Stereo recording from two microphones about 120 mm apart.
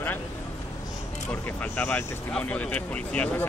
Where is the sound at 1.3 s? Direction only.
15° left (ahead or behind).